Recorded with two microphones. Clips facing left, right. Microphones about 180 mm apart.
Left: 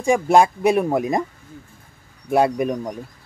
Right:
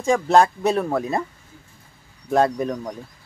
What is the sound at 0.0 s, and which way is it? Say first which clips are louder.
Speech: left 1 dB; 15° left (ahead or behind).